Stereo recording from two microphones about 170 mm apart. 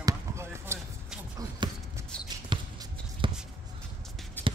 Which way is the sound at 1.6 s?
25° right (ahead or behind).